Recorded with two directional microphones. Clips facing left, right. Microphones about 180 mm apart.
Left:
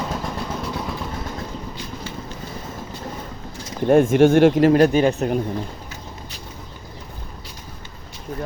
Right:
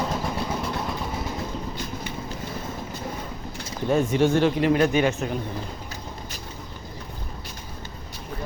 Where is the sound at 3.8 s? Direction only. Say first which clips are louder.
Left 7 dB; 50° left (ahead or behind); by 5.3 s 35° left (ahead or behind).